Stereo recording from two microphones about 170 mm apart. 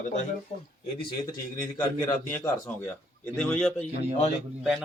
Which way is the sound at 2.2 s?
10° left (ahead or behind).